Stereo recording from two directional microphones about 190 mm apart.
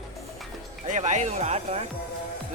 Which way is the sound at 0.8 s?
40° right (ahead or behind).